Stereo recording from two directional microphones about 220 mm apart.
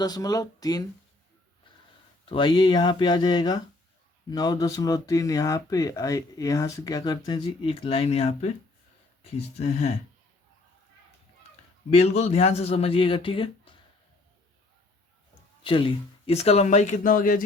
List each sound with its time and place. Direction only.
0.0 s speech: 15° left (ahead or behind)
2.3 s a man's voice: 20° left (ahead or behind)
11.9 s a man's voice: 30° left (ahead or behind)
15.6 s a man's voice: 25° left (ahead or behind); by 17.4 s 40° left (ahead or behind)